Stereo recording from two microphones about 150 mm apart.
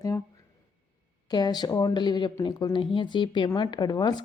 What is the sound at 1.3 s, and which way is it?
A woman's voice, 30° left (ahead or behind).